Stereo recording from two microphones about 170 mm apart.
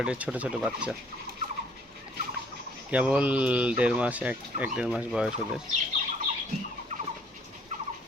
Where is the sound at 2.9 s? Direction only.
10° right (ahead or behind).